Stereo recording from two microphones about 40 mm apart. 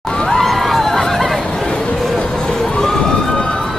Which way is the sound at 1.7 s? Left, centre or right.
Left.